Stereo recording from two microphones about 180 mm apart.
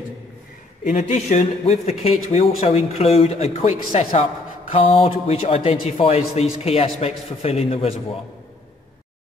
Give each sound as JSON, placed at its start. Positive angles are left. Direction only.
{"t": 0.8, "sound": "speech", "side_deg": 40}